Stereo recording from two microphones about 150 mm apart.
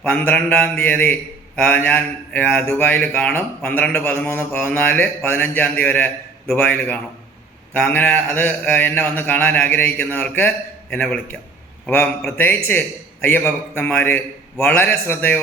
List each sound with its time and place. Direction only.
0.0 s mantra: 10° left (ahead or behind)